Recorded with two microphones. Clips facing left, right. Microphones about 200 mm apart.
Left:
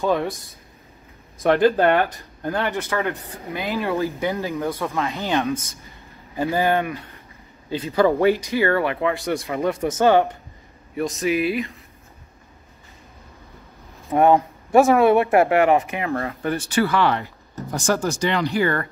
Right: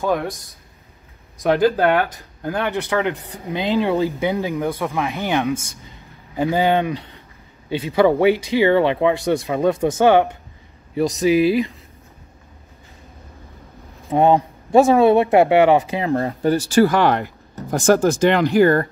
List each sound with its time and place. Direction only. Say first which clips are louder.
1.4 s speech: even; centre (ahead or behind)
2.1 s speech: right 1 dB; 15° right (ahead or behind)
7.9 s speech: right 2 dB; 10° right (ahead or behind)
11.2 s speech: right 6 dB; 35° right (ahead or behind)
14.0 s speech: right 1 dB; 15° right (ahead or behind); by 18.9 s 40° right (ahead or behind)